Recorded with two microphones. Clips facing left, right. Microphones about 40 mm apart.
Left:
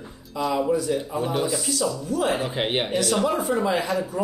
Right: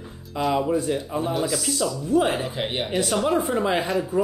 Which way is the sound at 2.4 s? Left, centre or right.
Left.